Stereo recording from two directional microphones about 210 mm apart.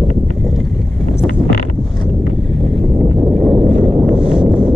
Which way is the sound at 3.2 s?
Centre (ahead or behind).